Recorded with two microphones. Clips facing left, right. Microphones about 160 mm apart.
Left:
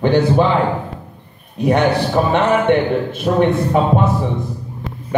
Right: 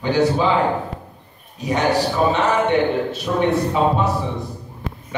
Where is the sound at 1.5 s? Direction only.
60° left (ahead or behind).